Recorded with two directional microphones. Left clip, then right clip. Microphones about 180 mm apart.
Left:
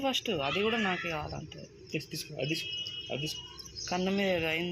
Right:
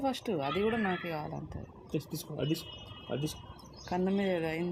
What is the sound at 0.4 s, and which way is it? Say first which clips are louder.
Speech: even; 15° right (ahead or behind).